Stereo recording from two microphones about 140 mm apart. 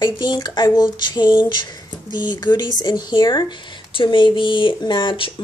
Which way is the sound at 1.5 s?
30° left (ahead or behind).